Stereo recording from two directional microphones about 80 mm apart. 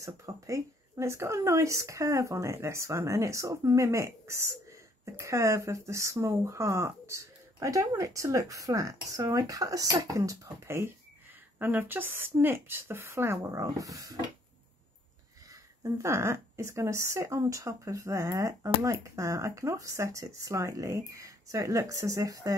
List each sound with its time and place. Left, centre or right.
0.0 s speech: right
11.5 s speech: right
15.8 s speech: right